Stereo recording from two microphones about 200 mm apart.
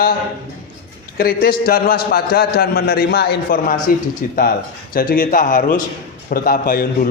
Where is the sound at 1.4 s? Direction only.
45° left (ahead or behind).